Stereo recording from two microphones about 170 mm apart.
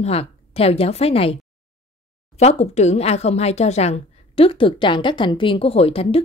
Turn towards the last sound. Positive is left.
turn(degrees=35)  # may be behind; listen again after turning